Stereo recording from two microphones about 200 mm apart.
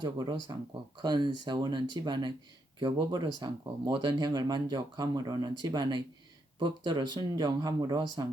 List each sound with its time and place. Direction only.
0.0 s speech: 20° right (ahead or behind)